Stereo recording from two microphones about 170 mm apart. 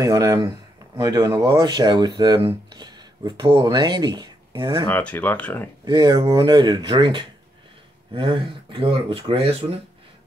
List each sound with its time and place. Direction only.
0.0 s speech: 20° right (ahead or behind)
4.8 s speech: 10° left (ahead or behind)
5.9 s speech: 25° right (ahead or behind)